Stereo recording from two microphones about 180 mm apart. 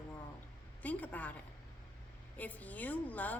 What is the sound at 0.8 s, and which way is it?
Speech, 10° left (ahead or behind).